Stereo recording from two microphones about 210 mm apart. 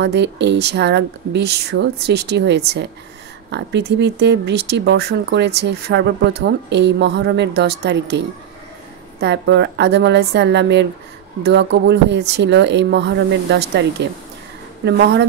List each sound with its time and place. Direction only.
0.0 s speech: 55° right (ahead or behind)